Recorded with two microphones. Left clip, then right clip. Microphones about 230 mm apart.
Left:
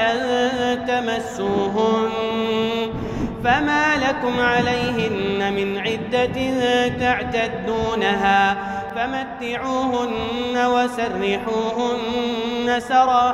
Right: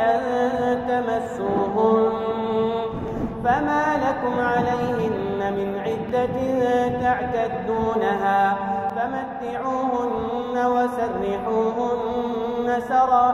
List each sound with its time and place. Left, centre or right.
0.0 s mantra: left
1.6 s music: left
3.4 s mantra: left
6.1 s music: left
10.5 s mantra: left
12.6 s chant: left